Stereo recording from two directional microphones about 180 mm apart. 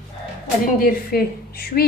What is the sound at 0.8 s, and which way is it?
A woman's voice, 55° left (ahead or behind).